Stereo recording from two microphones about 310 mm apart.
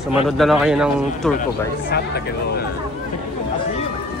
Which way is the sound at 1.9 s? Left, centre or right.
Left.